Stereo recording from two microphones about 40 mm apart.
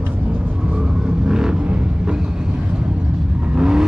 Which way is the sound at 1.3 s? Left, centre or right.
Centre.